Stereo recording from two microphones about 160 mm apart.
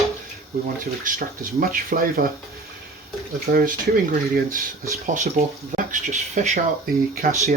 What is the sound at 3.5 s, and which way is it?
Speech, 60° right (ahead or behind).